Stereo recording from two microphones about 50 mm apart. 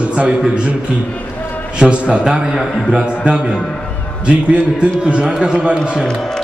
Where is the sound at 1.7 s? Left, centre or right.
Right.